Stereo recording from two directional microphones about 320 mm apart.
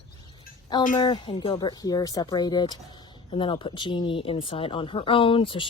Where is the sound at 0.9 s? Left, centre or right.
Centre.